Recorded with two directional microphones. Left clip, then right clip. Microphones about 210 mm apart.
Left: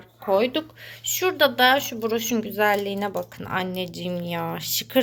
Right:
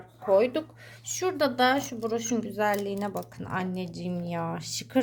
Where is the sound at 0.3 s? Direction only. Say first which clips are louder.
Left 2 dB; 5° right (ahead or behind).